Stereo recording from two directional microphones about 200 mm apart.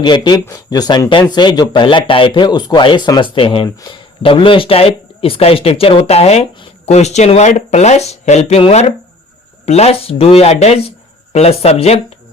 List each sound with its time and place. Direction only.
0.0 s speech: 20° left (ahead or behind)